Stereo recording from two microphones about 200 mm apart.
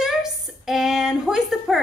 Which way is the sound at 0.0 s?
Centre (ahead or behind).